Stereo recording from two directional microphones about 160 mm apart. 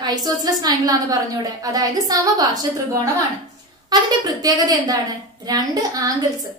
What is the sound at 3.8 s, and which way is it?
A woman's voice, 25° right (ahead or behind).